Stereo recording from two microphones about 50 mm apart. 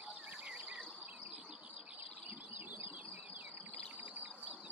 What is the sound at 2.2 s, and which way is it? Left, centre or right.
Bird, right.